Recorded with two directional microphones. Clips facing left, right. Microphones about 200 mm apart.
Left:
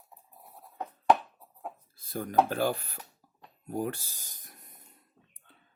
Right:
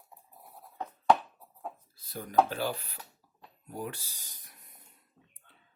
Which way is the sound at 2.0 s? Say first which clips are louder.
Even; 50° left (ahead or behind).